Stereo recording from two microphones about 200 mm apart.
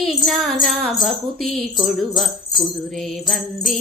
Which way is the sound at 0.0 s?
Centre (ahead or behind).